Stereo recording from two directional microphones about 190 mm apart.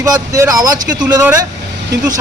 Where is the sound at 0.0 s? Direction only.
15° right (ahead or behind).